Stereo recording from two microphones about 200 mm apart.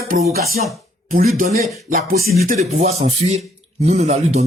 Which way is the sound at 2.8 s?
30° right (ahead or behind).